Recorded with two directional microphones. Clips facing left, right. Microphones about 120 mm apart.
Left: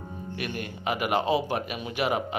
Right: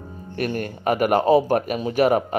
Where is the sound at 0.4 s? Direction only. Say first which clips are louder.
Right 10 dB; 45° right (ahead or behind).